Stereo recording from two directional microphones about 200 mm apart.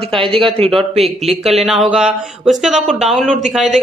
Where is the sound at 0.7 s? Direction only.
Centre (ahead or behind).